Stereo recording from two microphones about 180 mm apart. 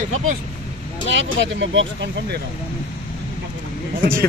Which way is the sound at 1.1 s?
80° right.